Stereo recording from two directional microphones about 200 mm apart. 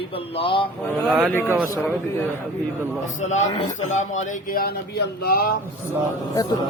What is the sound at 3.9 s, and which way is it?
Speech, 35° left (ahead or behind).